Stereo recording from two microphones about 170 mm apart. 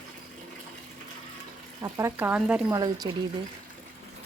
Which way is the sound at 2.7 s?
25° right (ahead or behind).